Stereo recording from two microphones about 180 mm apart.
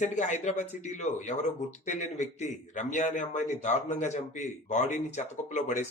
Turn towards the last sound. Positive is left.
turn(degrees=40)  # may be behind; listen again after turning